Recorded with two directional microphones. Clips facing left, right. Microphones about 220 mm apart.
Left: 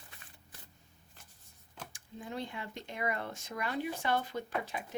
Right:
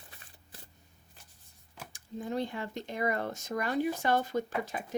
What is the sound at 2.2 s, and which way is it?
Speech, 40° right (ahead or behind).